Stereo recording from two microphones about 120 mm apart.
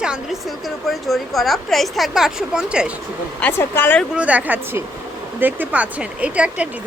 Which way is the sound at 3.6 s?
15° left (ahead or behind).